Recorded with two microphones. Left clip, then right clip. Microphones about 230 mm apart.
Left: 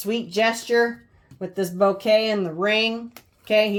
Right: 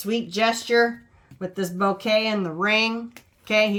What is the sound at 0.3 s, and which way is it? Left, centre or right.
Speech, centre.